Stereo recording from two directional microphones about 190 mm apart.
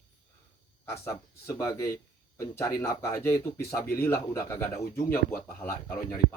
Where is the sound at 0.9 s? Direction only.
15° left (ahead or behind).